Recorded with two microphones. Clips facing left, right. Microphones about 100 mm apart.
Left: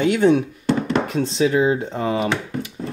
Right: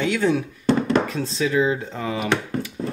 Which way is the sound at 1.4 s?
25° left (ahead or behind).